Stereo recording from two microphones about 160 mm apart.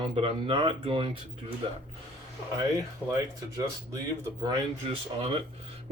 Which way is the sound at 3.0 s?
10° left (ahead or behind).